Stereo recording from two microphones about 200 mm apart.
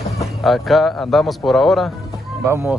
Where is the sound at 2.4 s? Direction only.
10° right (ahead or behind).